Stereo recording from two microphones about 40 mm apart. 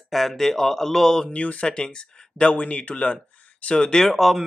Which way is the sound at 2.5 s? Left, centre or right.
Left.